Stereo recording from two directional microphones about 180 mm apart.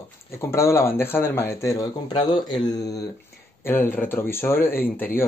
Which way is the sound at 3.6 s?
10° left (ahead or behind).